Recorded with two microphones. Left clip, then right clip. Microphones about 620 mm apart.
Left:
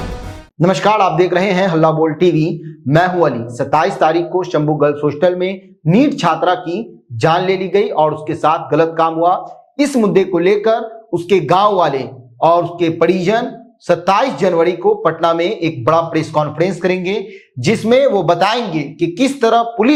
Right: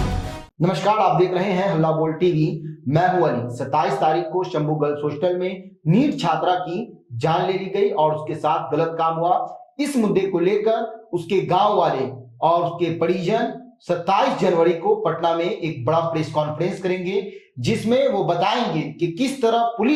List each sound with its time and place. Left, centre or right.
0.6 s speech: left